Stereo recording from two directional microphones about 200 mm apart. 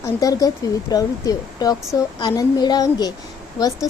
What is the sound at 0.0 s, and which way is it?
Speech, 15° left (ahead or behind).